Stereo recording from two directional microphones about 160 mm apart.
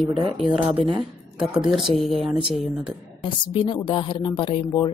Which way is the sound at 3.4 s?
30° left (ahead or behind).